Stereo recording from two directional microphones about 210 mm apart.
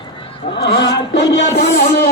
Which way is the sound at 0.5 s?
55° left (ahead or behind).